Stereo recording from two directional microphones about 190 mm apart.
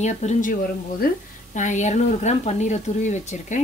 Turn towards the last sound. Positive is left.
turn(degrees=40)  # may be behind; listen again after turning